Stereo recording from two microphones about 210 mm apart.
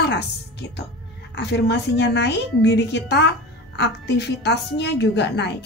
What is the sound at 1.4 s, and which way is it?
A woman's voice, 55° left (ahead or behind).